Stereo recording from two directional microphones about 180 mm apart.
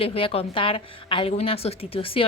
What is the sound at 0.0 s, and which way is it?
A woman's voice, 30° left (ahead or behind).